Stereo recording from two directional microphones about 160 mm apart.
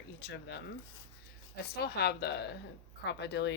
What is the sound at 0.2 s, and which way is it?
Speech, 90° left.